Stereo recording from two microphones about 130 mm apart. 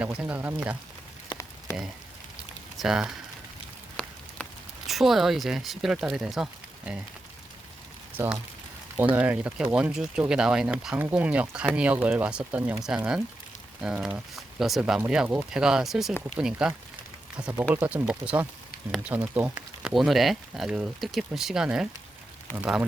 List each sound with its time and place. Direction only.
0.0 s speech: 10° right (ahead or behind)
1.7 s rain on surface: 25° left (ahead or behind)
2.7 s speech: 5° right (ahead or behind)
4.0 s a sound: 5° left (ahead or behind)
4.4 s rain on surface: 10° left (ahead or behind)
4.9 s speech: centre (ahead or behind)
9.1 s speech: 10° right (ahead or behind)
19.9 s speech: centre (ahead or behind)